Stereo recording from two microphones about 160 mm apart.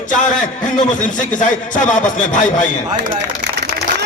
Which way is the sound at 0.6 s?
50° left (ahead or behind).